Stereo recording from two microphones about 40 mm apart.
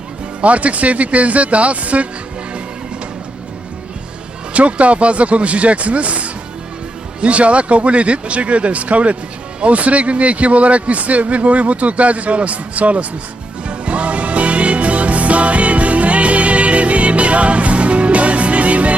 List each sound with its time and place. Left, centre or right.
0.4 s speech: right
4.5 s speech: right
13.7 s music: right